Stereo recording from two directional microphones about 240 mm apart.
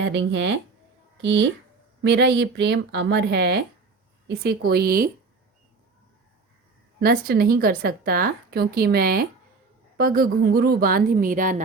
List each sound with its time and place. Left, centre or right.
0.1 s a woman's voice: right
7.0 s a woman's voice: right